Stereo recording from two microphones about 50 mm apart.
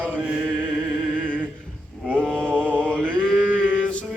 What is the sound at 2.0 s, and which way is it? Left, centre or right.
Mantra, left.